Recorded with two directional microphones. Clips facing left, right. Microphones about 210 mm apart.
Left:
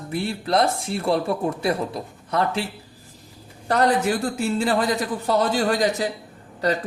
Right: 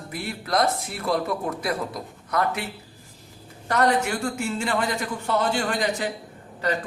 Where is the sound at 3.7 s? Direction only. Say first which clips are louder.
Left 2 dB; 35° left (ahead or behind).